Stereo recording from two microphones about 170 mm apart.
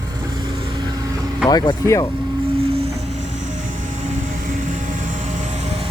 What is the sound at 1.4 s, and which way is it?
Speech, 20° left (ahead or behind).